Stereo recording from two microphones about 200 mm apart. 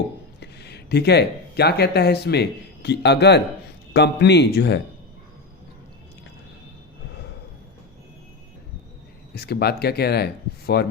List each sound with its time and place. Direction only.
0.3 s speech: 55° left (ahead or behind)
9.3 s speech: 50° left (ahead or behind)